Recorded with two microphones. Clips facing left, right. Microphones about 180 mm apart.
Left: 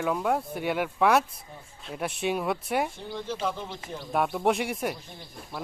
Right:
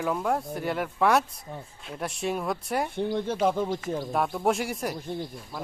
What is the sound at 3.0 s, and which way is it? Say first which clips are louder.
Speech: right 7 dB; 55° right (ahead or behind).